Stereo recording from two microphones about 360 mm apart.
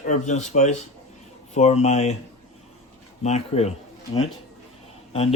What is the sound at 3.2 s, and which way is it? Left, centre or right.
Speech, centre.